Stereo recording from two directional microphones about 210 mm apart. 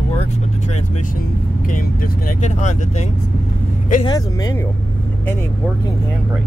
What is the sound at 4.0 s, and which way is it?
Speech, 20° left (ahead or behind).